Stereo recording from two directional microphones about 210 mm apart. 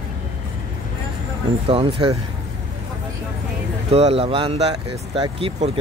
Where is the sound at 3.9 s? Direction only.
30° right (ahead or behind).